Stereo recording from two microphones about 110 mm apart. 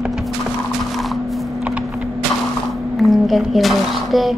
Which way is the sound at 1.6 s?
15° right (ahead or behind).